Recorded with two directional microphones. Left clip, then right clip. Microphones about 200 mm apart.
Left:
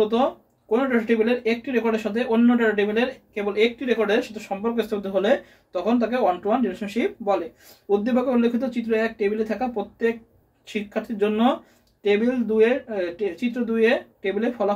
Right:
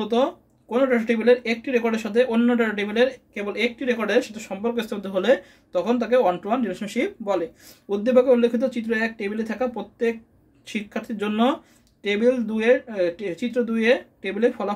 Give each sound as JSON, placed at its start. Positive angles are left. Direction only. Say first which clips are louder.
{"t": 0.1, "sound": "speech", "louder": "even", "side_deg": -45}